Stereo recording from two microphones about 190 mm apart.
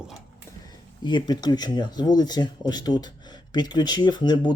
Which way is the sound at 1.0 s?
25° left (ahead or behind).